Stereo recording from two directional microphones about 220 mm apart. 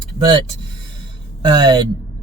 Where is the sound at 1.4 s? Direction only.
20° right (ahead or behind).